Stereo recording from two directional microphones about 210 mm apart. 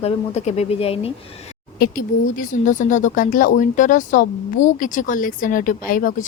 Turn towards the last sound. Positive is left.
turn(degrees=40)  # may be behind; listen again after turning